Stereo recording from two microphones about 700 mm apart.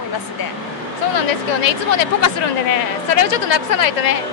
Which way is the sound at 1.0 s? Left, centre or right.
Left.